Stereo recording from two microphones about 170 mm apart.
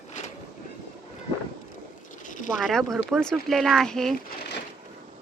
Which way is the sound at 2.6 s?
Centre (ahead or behind).